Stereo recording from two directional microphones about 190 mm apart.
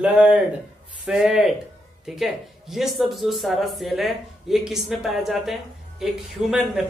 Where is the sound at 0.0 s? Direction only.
5° right (ahead or behind).